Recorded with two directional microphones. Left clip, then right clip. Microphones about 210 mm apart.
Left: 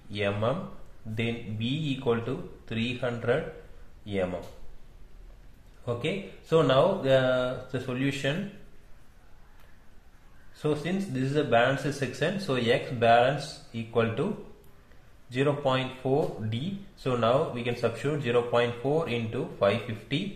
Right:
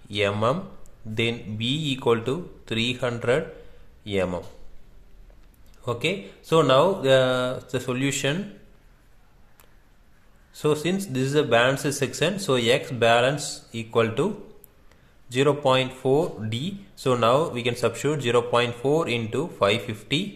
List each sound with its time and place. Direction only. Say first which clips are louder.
0.1 s a man's voice: right 5 dB; 40° right (ahead or behind)
5.9 s speech: right 5 dB; 40° right (ahead or behind)
10.6 s speech: right 6 dB; 40° right (ahead or behind)
15.2 s speech: right 6 dB; 40° right (ahead or behind)